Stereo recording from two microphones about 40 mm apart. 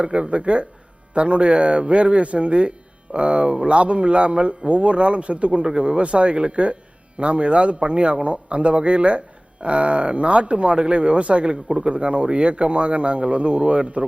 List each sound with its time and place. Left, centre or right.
0.0 s speech: right